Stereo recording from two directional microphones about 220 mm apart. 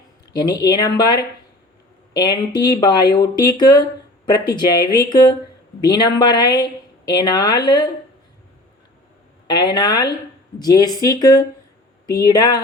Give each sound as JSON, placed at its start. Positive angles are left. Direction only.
{"t": 0.3, "sound": "speech", "side_deg": 20}
{"t": 9.5, "sound": "speech", "side_deg": 20}